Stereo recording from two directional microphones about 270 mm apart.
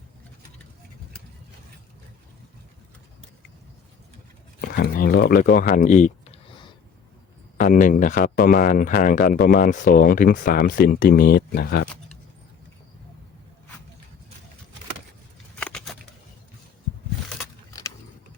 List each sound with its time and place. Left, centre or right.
4.6 s speech: left; by 6.7 s centre
7.6 s speech: left
15.5 s a sound: centre